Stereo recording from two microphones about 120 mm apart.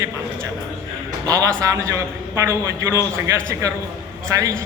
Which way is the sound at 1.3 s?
30° right (ahead or behind).